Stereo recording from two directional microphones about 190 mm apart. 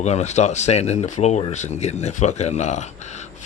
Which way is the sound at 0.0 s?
35° left (ahead or behind).